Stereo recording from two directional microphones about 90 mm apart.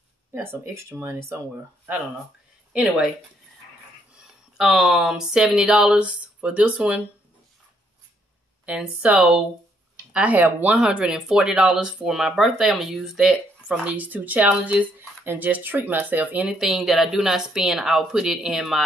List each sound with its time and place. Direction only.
0.3 s speech: 25° right (ahead or behind)
2.7 s speech: 10° right (ahead or behind)
4.2 s speech: 5° right (ahead or behind)
8.6 s speech: 15° right (ahead or behind)
16.4 s speech: 5° right (ahead or behind)